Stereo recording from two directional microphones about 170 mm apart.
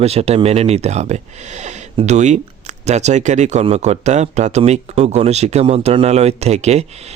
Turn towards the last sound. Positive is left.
turn(degrees=-40)  # may be behind; listen again after turning